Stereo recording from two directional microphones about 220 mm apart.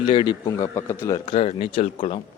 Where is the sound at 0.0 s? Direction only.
20° left (ahead or behind).